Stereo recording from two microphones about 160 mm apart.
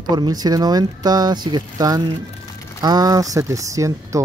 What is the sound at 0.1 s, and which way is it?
Speech, 25° right (ahead or behind).